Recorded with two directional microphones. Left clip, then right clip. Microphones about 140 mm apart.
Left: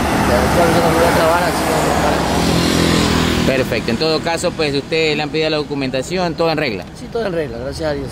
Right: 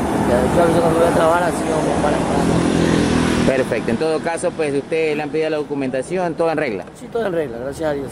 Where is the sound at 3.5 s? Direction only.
15° right (ahead or behind).